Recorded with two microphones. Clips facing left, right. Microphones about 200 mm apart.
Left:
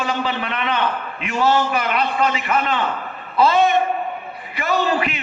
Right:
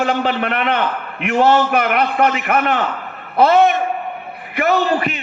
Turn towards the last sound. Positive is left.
turn(degrees=-45)  # may be behind; listen again after turning